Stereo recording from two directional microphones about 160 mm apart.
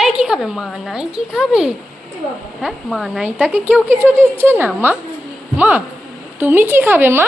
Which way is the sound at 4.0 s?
15° right (ahead or behind).